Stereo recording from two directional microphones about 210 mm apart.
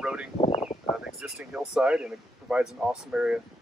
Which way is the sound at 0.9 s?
Centre (ahead or behind).